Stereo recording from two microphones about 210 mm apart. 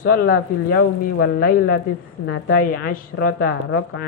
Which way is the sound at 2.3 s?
60° left (ahead or behind).